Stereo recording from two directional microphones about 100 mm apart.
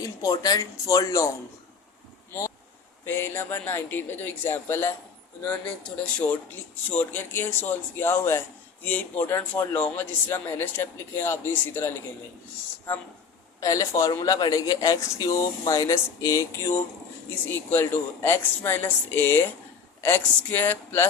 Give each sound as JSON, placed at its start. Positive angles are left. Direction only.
{"t": 0.2, "sound": "speech", "side_deg": 40}
{"t": 3.1, "sound": "a man's voice", "side_deg": 20}
{"t": 5.5, "sound": "a man's voice", "side_deg": 10}
{"t": 13.6, "sound": "a man's voice", "side_deg": 35}